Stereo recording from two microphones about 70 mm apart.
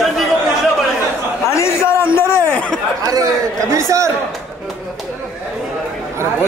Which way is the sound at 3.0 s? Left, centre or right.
Right.